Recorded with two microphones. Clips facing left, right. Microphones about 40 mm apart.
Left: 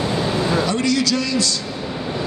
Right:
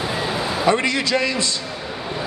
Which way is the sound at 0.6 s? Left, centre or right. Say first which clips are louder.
Right 1 dB; right.